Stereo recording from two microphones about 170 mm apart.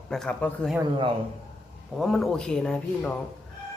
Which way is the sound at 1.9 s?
Centre (ahead or behind).